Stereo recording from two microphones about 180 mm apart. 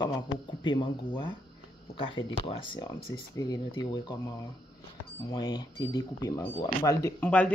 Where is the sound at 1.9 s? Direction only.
30° left (ahead or behind).